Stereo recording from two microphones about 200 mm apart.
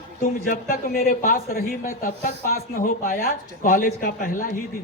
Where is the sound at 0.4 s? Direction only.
45° left (ahead or behind).